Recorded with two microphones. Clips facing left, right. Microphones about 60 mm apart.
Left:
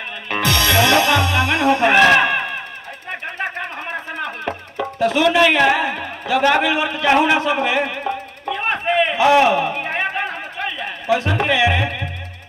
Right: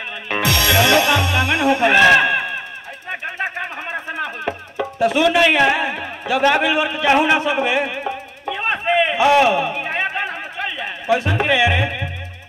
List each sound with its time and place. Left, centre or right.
0.3 s music: right
2.0 s speech: centre
3.1 s music: centre
9.5 s a sound: centre
11.1 s music: centre